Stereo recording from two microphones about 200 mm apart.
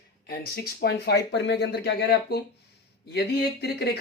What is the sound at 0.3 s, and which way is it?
Speech, 50° left (ahead or behind).